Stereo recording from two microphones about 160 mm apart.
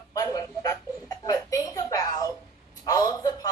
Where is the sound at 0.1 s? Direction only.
20° left (ahead or behind).